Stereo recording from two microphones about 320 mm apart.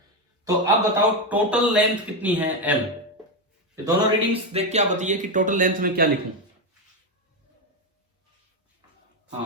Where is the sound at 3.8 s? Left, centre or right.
Centre.